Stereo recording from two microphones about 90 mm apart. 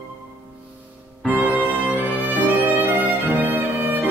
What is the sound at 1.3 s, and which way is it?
Music, 20° right (ahead or behind).